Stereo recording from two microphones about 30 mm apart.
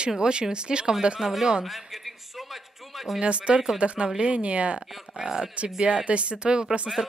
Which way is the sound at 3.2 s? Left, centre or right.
Right.